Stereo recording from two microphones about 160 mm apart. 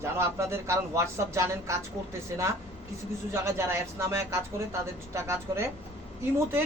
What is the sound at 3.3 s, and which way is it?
A woman's voice, 15° right (ahead or behind).